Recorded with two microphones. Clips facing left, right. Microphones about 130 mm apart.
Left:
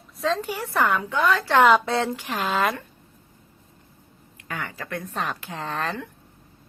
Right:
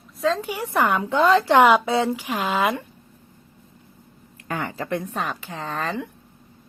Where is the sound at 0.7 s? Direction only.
15° right (ahead or behind).